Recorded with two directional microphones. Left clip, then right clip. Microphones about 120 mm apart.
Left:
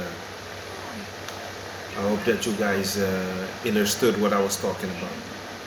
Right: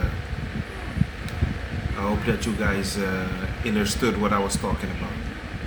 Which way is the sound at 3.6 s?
30° right (ahead or behind).